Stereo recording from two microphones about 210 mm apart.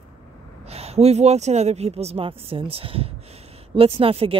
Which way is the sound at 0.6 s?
30° right (ahead or behind).